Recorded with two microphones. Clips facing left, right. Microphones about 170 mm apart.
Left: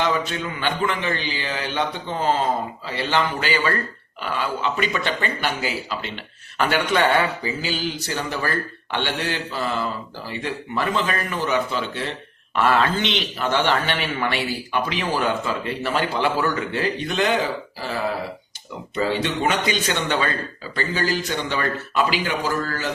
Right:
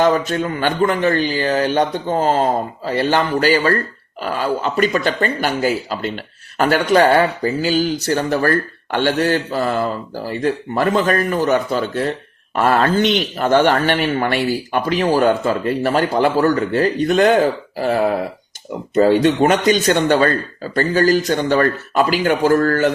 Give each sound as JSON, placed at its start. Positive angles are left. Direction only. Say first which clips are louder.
{"t": 0.0, "sound": "speech", "louder": "right 7 dB", "side_deg": -45}